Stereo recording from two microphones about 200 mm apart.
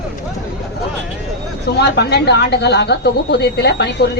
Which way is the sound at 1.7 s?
55° left (ahead or behind).